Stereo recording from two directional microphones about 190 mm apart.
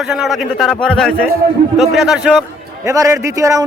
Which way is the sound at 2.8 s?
15° right (ahead or behind).